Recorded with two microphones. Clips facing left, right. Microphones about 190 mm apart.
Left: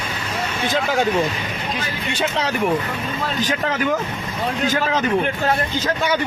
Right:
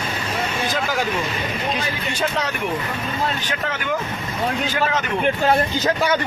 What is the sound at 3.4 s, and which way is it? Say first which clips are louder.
Speech: left 5 dB; 40° left (ahead or behind).